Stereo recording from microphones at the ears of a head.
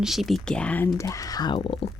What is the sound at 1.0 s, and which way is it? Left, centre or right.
Speech, left.